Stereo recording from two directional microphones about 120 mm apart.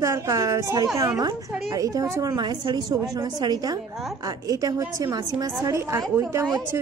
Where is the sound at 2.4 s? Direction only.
35° right (ahead or behind).